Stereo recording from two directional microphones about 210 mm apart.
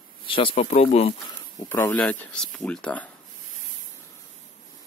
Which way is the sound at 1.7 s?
10° left (ahead or behind).